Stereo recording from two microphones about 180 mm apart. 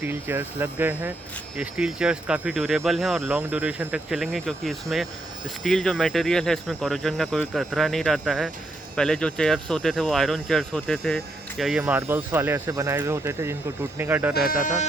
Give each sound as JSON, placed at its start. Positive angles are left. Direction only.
{"t": 0.0, "sound": "speech", "side_deg": -10}
{"t": 11.8, "sound": "speech", "side_deg": -10}
{"t": 14.3, "sound": "speech", "side_deg": 50}